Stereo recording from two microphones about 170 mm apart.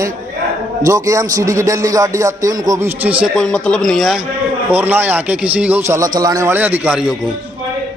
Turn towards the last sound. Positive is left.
turn(degrees=-5)  # may be behind; listen again after turning